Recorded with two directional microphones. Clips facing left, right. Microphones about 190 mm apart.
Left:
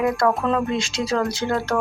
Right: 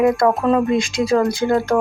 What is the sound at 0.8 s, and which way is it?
Speech, 55° right (ahead or behind).